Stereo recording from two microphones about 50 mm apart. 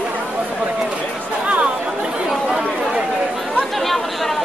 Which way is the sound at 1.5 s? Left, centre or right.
Right.